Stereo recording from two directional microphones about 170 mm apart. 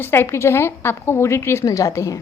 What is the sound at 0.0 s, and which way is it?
A woman's voice, 15° left (ahead or behind).